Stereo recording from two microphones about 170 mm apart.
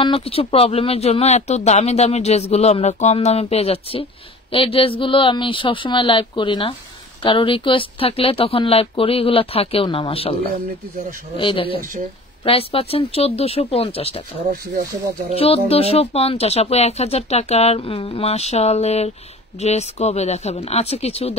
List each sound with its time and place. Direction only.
0.0 s speech: 35° left (ahead or behind)
15.3 s speech: 35° left (ahead or behind)